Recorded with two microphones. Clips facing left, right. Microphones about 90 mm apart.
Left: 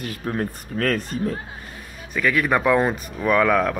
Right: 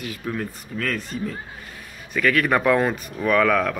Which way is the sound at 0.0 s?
40° left (ahead or behind).